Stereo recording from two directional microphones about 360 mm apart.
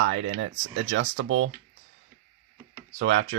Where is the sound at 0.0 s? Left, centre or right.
Right.